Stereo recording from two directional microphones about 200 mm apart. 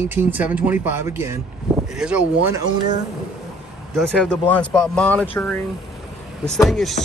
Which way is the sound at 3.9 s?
Centre (ahead or behind).